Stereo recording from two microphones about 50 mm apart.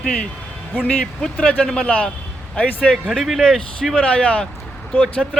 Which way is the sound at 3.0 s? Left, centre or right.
Centre.